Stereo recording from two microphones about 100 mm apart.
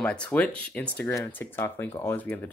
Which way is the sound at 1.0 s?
30° left (ahead or behind).